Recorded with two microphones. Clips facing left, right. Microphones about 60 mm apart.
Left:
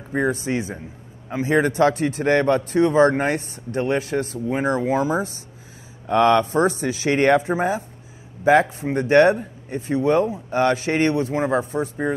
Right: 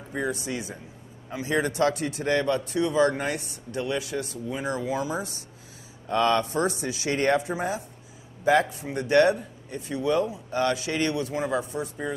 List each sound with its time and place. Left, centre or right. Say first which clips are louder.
0.1 s speech: left 7 dB; left